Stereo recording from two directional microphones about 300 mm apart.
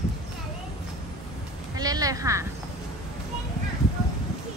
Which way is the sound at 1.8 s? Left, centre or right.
Centre.